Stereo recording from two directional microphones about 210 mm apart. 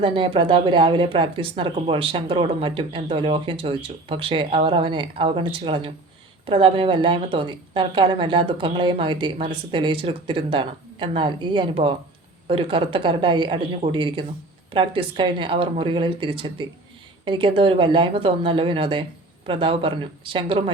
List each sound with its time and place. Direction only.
0.0 s speech: 25° right (ahead or behind)